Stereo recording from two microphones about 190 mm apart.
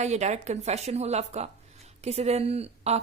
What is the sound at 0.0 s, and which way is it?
Speech, 35° right (ahead or behind).